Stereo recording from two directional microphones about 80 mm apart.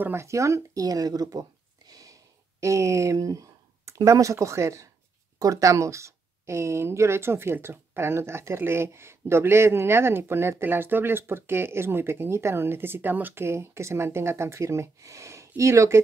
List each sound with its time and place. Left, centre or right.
0.0 s speech: right
1.9 s a sound: right
2.6 s speech: right